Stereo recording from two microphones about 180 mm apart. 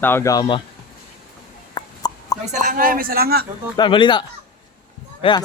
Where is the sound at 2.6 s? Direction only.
50° right (ahead or behind).